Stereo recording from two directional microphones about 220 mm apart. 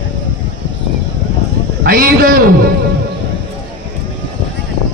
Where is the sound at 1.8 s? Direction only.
40° right (ahead or behind).